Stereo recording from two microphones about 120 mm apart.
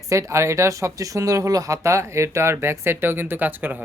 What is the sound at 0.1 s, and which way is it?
Speech, 25° right (ahead or behind).